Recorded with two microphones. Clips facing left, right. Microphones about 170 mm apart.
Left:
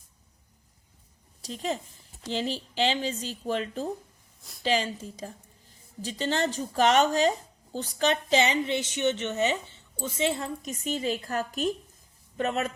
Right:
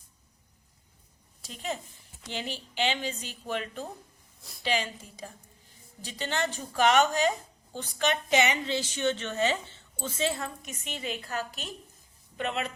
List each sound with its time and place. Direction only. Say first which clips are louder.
1.4 s a woman's voice: left 4 dB; 40° left (ahead or behind)